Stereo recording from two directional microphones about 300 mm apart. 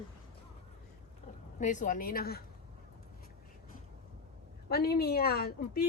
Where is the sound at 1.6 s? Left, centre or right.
Left.